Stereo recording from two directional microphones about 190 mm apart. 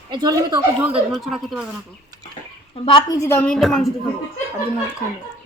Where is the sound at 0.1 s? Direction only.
20° right (ahead or behind).